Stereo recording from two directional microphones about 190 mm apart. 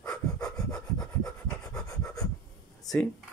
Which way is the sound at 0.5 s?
20° left (ahead or behind).